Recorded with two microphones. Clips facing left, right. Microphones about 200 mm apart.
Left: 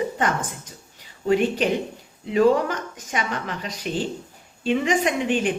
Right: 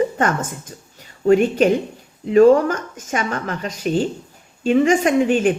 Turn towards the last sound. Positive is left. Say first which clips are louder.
# right 6 dB
turn(degrees=-45)  # may be behind; listen again after turning